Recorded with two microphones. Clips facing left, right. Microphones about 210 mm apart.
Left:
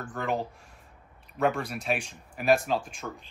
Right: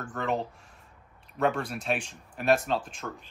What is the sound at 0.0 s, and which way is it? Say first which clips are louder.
Speech: even; centre (ahead or behind).